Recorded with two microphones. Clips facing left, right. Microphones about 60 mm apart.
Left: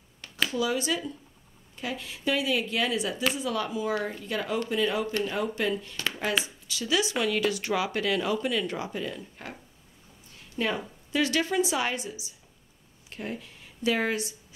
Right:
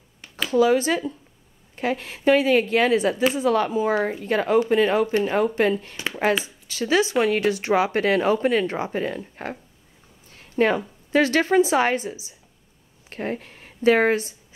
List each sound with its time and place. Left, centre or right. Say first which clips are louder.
0.5 s speech: right 11 dB; right
13.1 s a woman's voice: right 7 dB; right